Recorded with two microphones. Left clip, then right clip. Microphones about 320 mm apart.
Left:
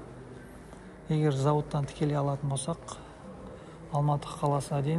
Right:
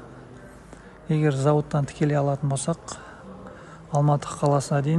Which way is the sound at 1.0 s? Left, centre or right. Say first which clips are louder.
Right 6 dB; centre.